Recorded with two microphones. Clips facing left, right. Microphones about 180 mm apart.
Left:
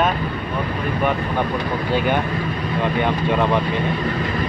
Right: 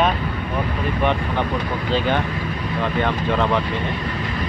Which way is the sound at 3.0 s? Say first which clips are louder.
Left 1 dB; 15° left (ahead or behind).